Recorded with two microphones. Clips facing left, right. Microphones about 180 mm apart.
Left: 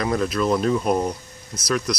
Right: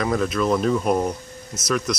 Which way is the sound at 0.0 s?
Centre (ahead or behind).